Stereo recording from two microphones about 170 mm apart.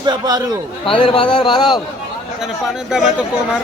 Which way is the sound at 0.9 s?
30° left (ahead or behind).